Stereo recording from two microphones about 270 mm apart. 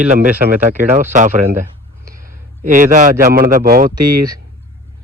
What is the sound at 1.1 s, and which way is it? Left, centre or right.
A man's voice, right.